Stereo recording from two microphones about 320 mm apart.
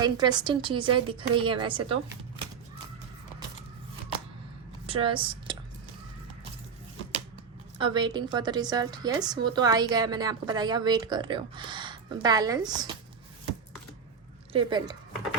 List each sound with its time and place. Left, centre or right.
0.0 s a woman's voice: centre
4.9 s speech: centre
7.8 s a woman's voice: centre
14.5 s a woman's voice: centre